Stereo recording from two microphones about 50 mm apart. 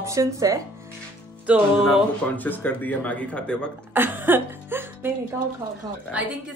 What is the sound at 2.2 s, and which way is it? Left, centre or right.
Speech, left.